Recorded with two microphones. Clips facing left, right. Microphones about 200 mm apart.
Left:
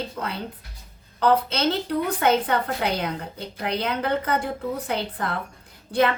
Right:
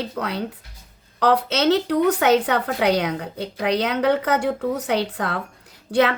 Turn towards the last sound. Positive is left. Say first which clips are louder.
# right 3 dB
turn(degrees=-75)  # may be behind; listen again after turning